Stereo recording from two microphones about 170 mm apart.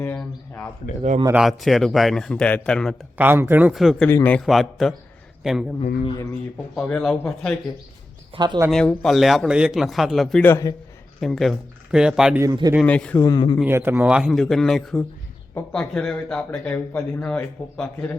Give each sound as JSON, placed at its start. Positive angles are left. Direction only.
{"t": 0.0, "sound": "a sound", "side_deg": 10}
{"t": 1.3, "sound": "speech", "side_deg": 0}
{"t": 3.2, "sound": "speech", "side_deg": -10}
{"t": 4.1, "sound": "a man's voice", "side_deg": 10}
{"t": 6.7, "sound": "speech", "side_deg": 5}
{"t": 8.4, "sound": "speech", "side_deg": -25}
{"t": 8.7, "sound": "speech", "side_deg": 5}
{"t": 10.4, "sound": "a man's voice", "side_deg": 15}
{"t": 11.2, "sound": "speech", "side_deg": 0}
{"t": 12.4, "sound": "speech", "side_deg": -20}
{"t": 12.8, "sound": "a man's voice", "side_deg": 5}
{"t": 13.2, "sound": "speech", "side_deg": 25}
{"t": 13.7, "sound": "speech", "side_deg": -15}